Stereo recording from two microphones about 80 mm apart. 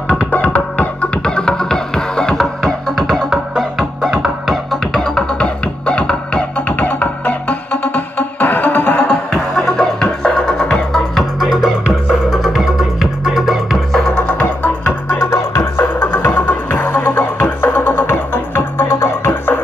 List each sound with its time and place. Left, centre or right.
0.1 s music: centre
5.0 s music: centre
9.3 s music: centre
14.2 s music: centre
15.2 s music: left